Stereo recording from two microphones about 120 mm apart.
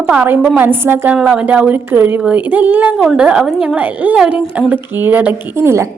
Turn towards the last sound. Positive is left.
turn(degrees=-25)  # may be behind; listen again after turning